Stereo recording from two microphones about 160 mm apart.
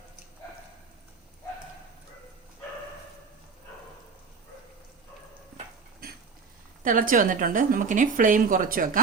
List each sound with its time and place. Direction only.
6.8 s a woman's voice: 55° right (ahead or behind)